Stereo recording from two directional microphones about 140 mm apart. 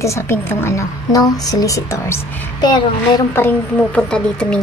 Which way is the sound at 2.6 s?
30° left (ahead or behind).